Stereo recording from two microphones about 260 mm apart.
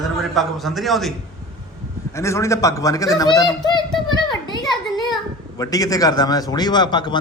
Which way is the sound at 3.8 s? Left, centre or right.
Centre.